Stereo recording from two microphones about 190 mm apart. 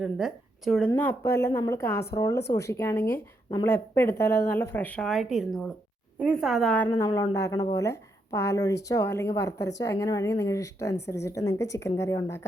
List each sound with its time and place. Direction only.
0.0 s a woman's voice: centre (ahead or behind)
0.9 s a woman's voice: 10° left (ahead or behind)
7.1 s a woman's voice: 20° left (ahead or behind)